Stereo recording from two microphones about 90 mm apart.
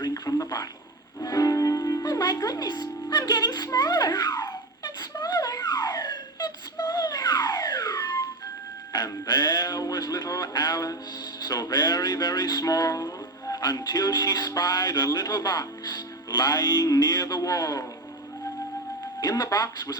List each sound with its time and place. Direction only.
0.0 s a sound: 40° left (ahead or behind)
1.2 s music: 40° left (ahead or behind)
19.2 s speech: 40° left (ahead or behind)